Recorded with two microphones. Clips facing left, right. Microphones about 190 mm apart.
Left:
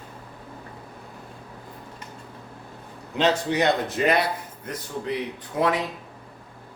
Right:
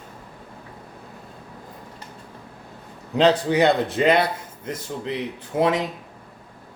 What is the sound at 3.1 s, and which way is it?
A man's voice, 30° right (ahead or behind).